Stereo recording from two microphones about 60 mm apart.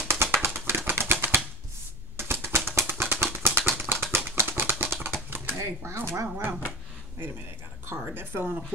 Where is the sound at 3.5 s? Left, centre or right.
Right.